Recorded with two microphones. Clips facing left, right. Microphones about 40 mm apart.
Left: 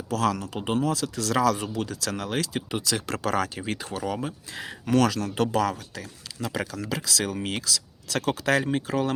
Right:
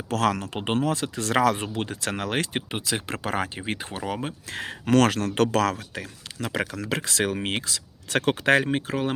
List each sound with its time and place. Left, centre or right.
0.1 s speech: right
2.6 s speech: right
4.4 s speech: right
8.9 s speech: right